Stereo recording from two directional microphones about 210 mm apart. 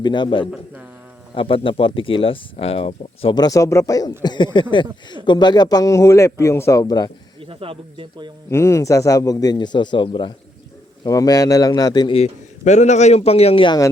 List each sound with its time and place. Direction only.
0.0 s a man's voice: 20° left (ahead or behind)
7.4 s speech: 25° right (ahead or behind)
8.4 s a man's voice: 15° left (ahead or behind)